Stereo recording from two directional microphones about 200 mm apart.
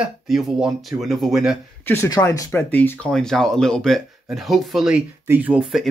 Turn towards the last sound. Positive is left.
turn(degrees=-5)  # may be behind; listen again after turning